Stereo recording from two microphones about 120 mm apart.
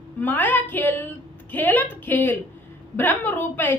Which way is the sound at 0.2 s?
15° left (ahead or behind).